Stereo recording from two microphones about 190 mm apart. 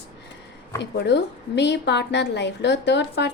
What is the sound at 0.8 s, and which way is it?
A woman's voice, 65° left (ahead or behind).